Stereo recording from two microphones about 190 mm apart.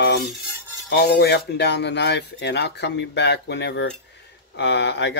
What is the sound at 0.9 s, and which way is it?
Speech, 60° left (ahead or behind).